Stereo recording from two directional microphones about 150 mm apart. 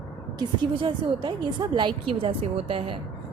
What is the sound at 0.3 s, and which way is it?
A woman's voice, 30° right (ahead or behind).